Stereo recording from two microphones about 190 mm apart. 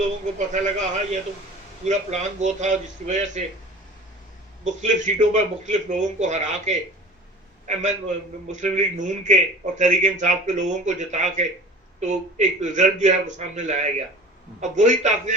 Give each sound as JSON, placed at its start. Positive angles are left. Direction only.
{"t": 0.3, "sound": "a man's voice", "side_deg": -40}
{"t": 4.6, "sound": "a man's voice", "side_deg": -40}